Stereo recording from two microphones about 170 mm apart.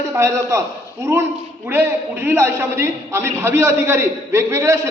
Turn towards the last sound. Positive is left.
turn(degrees=-20)  # may be behind; listen again after turning